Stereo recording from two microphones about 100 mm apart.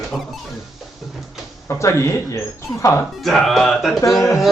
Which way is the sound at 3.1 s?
Centre (ahead or behind).